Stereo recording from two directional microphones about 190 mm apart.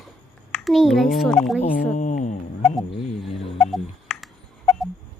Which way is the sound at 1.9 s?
40° left (ahead or behind).